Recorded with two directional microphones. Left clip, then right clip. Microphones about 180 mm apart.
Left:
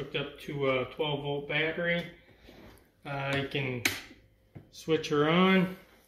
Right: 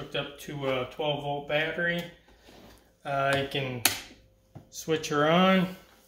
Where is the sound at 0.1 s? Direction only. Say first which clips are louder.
Right 5 dB; 25° right (ahead or behind).